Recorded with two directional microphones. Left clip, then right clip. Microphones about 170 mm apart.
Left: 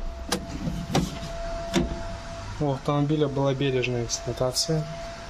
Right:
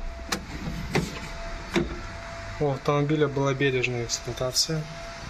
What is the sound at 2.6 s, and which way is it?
Speech, 10° right (ahead or behind).